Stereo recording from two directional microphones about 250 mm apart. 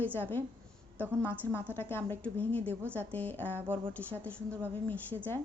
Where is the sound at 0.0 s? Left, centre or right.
Centre.